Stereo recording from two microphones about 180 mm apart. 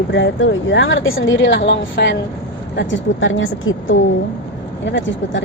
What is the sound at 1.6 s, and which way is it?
Speech, 75° left (ahead or behind).